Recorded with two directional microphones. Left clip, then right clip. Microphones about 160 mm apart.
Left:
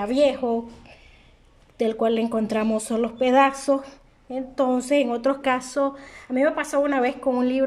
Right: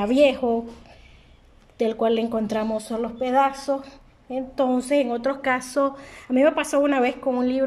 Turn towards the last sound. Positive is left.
turn(degrees=5)  # may be behind; listen again after turning